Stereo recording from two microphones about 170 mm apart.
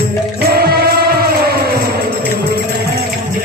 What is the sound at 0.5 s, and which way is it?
Music, 65° right (ahead or behind).